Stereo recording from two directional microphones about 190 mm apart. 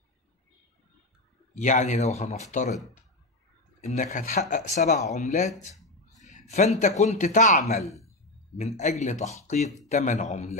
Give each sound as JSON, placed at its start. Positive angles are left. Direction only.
{"t": 1.5, "sound": "speech", "side_deg": 40}
{"t": 3.8, "sound": "speech", "side_deg": 40}
{"t": 6.5, "sound": "speech", "side_deg": 35}